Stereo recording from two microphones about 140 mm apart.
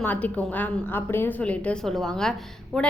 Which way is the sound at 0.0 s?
10° left (ahead or behind).